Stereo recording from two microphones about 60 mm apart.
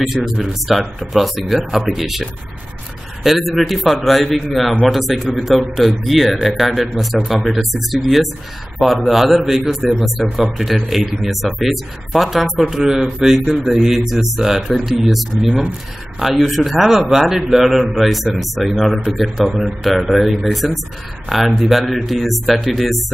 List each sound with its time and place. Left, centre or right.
0.1 s a man's voice: centre
3.3 s a man's voice: centre
15.4 s speech: centre
16.2 s a man's voice: centre